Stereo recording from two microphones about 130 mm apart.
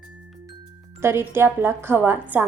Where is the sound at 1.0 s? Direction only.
20° right (ahead or behind).